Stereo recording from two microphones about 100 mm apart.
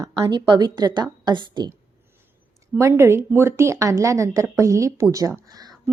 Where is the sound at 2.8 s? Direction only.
25° right (ahead or behind).